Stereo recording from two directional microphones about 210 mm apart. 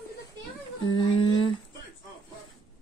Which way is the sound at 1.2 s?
90° left.